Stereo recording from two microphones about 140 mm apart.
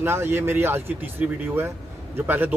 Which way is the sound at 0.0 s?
15° right (ahead or behind).